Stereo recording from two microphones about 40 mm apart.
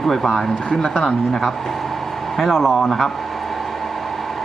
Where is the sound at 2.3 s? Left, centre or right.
Centre.